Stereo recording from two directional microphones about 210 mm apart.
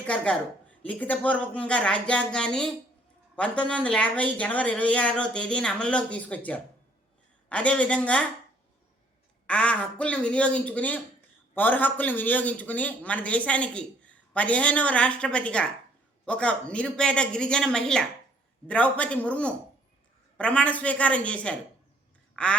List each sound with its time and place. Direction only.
0.0 s speech: 5° left (ahead or behind)
9.5 s a man's voice: 5° left (ahead or behind)
22.4 s quack: 5° left (ahead or behind)